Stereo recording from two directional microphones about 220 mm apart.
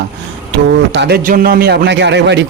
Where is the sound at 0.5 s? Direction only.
50° right (ahead or behind).